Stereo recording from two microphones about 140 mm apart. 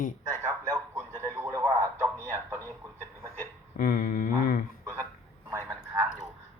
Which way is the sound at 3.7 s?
90° left.